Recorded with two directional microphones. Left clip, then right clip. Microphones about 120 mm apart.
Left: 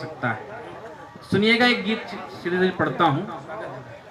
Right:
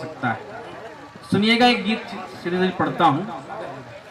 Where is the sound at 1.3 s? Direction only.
35° left (ahead or behind).